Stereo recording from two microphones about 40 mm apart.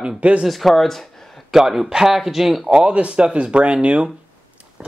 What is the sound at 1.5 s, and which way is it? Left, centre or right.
Speech, centre.